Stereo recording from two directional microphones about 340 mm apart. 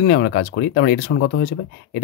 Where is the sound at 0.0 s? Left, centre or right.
Left.